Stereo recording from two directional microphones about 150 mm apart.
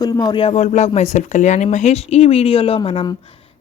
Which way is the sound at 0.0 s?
30° left (ahead or behind).